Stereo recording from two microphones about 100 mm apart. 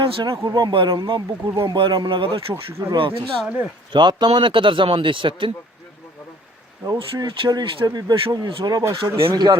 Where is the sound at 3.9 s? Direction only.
50° right (ahead or behind).